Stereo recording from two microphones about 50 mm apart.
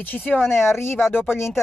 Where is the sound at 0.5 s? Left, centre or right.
Left.